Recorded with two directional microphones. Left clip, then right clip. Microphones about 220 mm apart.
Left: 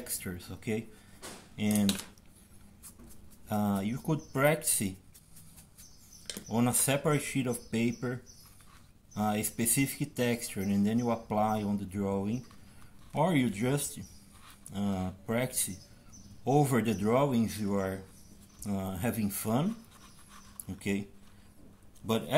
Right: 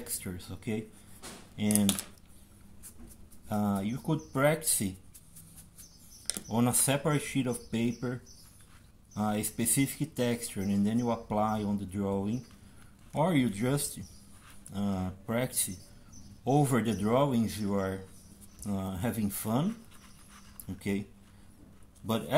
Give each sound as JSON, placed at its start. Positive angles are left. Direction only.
{"t": 0.0, "sound": "speech", "side_deg": 5}
{"t": 3.4, "sound": "speech", "side_deg": 5}
{"t": 6.5, "sound": "speech", "side_deg": 0}
{"t": 22.0, "sound": "a man's voice", "side_deg": 0}